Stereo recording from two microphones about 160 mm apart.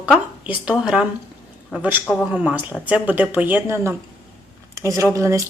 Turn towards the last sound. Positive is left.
turn(degrees=-20)  # may be behind; listen again after turning